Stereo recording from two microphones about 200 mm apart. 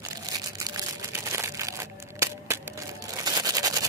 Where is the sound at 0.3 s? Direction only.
15° right (ahead or behind).